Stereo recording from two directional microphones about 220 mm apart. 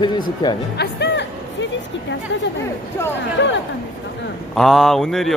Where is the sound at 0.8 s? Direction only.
50° left (ahead or behind).